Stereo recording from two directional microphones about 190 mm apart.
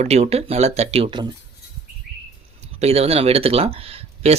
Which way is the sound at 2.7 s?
30° right (ahead or behind).